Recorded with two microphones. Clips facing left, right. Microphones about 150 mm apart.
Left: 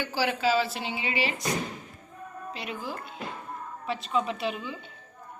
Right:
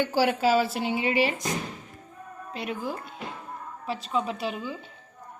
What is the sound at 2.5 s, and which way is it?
Speech, 50° right (ahead or behind).